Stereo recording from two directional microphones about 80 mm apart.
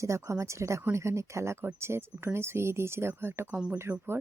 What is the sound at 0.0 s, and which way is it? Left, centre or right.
Speech, right.